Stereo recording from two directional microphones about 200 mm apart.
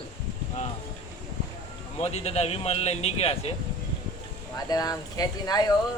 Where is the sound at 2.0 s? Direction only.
35° left (ahead or behind).